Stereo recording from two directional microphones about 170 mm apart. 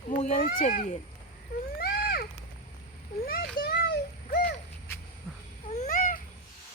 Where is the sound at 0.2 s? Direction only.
50° left (ahead or behind).